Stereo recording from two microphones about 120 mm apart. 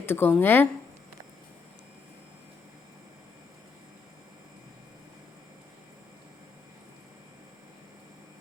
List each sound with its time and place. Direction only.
0.0 s speech: 15° left (ahead or behind)